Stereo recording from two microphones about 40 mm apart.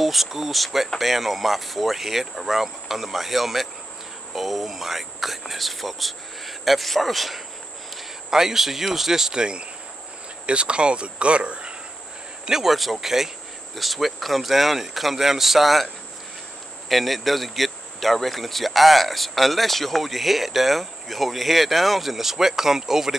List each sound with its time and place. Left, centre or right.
0.0 s speech: centre
8.3 s speech: centre; by 11.7 s right
12.4 s speech: centre
16.9 s speech: centre